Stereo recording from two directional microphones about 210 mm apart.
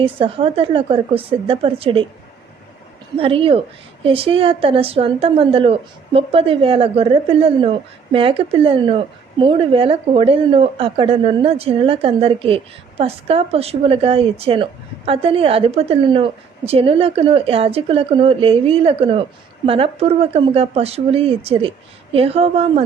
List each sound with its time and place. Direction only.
0.0 s a woman's voice: 25° right (ahead or behind)
3.2 s a woman's voice: 25° right (ahead or behind)